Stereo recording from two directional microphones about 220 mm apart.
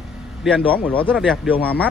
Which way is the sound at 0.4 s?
Centre (ahead or behind).